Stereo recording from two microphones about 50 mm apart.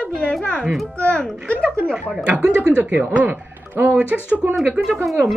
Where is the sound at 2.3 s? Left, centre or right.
Right.